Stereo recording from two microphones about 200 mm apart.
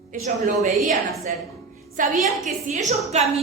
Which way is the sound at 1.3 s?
40° right (ahead or behind).